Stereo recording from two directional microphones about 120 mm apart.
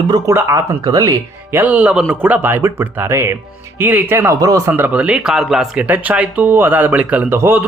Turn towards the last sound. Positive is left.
turn(degrees=-20)  # may be behind; listen again after turning